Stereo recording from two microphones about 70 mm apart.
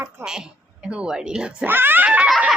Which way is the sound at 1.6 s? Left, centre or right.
Right.